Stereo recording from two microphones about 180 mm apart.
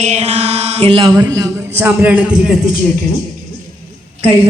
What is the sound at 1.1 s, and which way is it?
A man's voice, 20° right (ahead or behind).